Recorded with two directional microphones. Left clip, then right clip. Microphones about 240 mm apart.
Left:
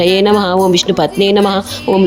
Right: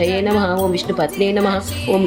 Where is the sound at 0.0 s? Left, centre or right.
Left.